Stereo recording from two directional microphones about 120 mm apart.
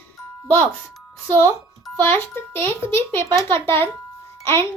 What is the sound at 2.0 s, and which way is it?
A child's voice, 20° left (ahead or behind).